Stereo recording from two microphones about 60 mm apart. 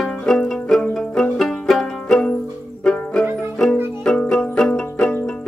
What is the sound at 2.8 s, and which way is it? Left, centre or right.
Music, centre.